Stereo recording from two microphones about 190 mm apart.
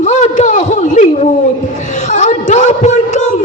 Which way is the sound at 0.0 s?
40° left (ahead or behind).